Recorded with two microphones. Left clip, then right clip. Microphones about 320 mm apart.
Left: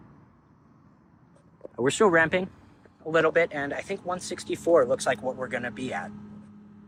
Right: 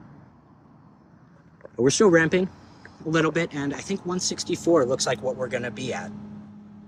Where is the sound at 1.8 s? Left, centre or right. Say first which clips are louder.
Right 3 dB; centre.